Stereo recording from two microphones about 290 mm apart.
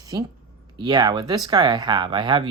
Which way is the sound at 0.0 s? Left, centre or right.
Centre.